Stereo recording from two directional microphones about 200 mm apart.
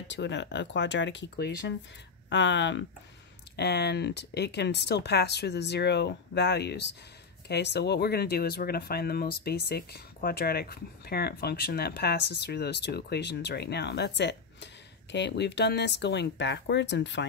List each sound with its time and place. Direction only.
0.1 s speech: 60° left (ahead or behind)